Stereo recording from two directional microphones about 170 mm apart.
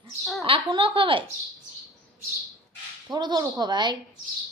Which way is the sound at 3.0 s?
25° right (ahead or behind).